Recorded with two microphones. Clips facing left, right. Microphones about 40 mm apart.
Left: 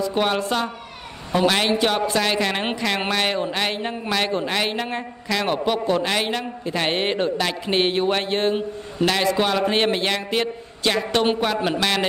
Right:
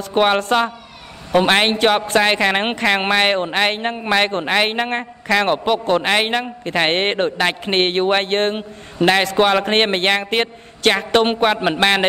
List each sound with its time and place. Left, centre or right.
0.0 s a man's voice: right